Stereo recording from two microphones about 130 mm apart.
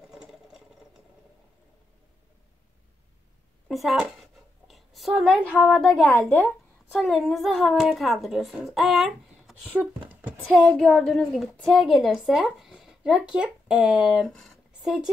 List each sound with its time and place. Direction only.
0.1 s sewing machine: 5° right (ahead or behind)
3.6 s a sound: centre (ahead or behind)
5.4 s speech: 10° left (ahead or behind)
5.7 s speech: centre (ahead or behind)
6.1 s speech: 10° left (ahead or behind)
6.9 s speech: centre (ahead or behind)
9.8 s a sound: 15° right (ahead or behind)
10.3 s speech: 5° left (ahead or behind)